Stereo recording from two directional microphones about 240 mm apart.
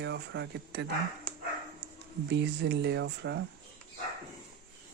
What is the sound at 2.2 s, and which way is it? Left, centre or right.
Speech, right.